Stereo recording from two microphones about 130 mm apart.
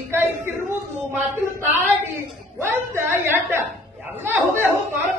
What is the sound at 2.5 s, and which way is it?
A woman's voice, 20° right (ahead or behind).